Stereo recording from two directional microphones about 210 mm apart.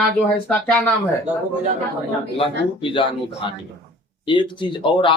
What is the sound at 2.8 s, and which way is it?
Speech, 25° left (ahead or behind).